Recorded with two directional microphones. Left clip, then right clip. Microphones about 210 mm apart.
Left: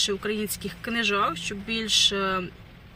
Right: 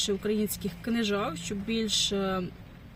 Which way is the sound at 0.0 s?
5° right (ahead or behind).